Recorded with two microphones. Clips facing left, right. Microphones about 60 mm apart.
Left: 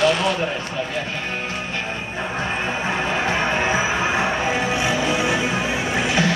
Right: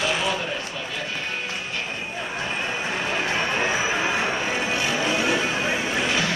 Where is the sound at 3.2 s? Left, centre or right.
Left.